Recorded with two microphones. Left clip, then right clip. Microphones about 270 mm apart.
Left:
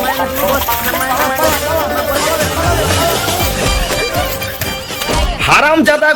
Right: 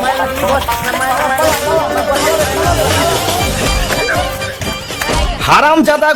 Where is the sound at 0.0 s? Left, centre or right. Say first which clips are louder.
Right 1 dB; centre.